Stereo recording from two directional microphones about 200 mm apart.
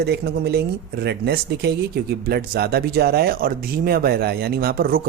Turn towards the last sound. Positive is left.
turn(degrees=-45)  # may be behind; listen again after turning